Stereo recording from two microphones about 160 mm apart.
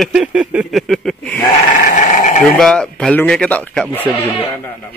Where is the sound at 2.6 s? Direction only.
5° left (ahead or behind).